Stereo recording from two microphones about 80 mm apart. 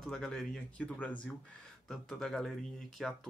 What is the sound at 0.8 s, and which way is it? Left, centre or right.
Speech, centre.